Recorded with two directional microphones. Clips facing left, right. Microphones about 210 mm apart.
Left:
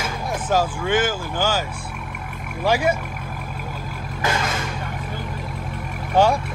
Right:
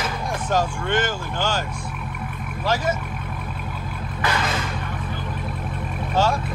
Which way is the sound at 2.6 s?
10° left (ahead or behind).